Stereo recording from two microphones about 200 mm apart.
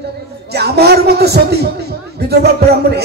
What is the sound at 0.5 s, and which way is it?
A man's voice, 55° right (ahead or behind).